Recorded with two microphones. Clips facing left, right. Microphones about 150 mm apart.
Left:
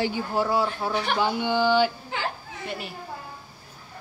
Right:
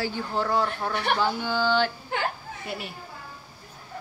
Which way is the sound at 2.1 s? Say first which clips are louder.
Right 2 dB; 55° right (ahead or behind).